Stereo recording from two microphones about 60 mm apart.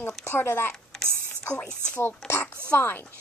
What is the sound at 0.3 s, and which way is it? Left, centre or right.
Speech, left.